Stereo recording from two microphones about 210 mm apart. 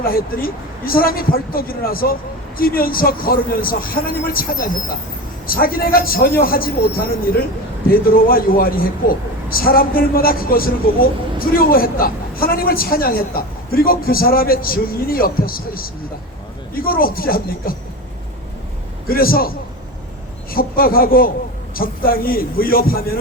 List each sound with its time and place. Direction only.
0.0 s speech: 45° left (ahead or behind)
19.0 s speech: 45° left (ahead or behind)